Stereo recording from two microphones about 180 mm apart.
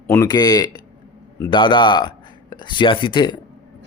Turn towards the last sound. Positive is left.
turn(degrees=25)  # may be behind; listen again after turning